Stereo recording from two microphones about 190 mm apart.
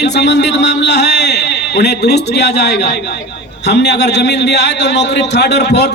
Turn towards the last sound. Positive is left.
turn(degrees=60)  # may be behind; listen again after turning